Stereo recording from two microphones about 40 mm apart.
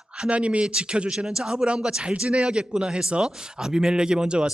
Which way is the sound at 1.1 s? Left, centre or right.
Centre.